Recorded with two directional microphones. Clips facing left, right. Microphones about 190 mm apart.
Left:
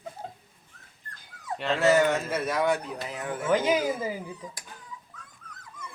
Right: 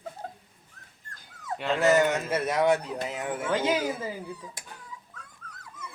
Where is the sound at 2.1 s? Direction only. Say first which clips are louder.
Even; 20° right (ahead or behind).